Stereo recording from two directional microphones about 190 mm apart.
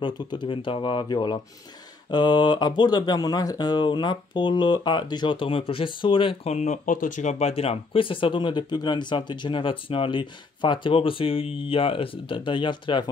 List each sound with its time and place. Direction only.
0.0 s speech: 25° left (ahead or behind)